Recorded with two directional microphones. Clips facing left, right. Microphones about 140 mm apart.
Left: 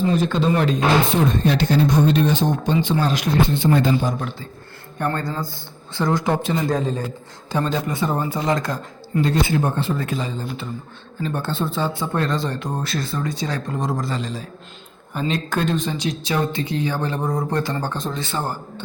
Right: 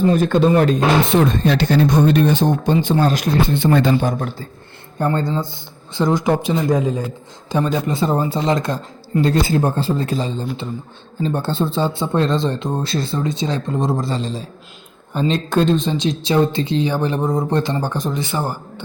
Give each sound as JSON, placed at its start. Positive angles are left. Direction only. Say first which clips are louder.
{"t": 0.0, "sound": "speech", "louder": "right 5 dB", "side_deg": -50}
{"t": 1.0, "sound": "speech", "louder": "right 3 dB", "side_deg": -85}
{"t": 3.7, "sound": "a man's voice", "louder": "right 5 dB", "side_deg": -70}
{"t": 4.9, "sound": "speech", "louder": "right 5 dB", "side_deg": -25}
{"t": 9.2, "sound": "a man's voice", "louder": "right 3 dB", "side_deg": -35}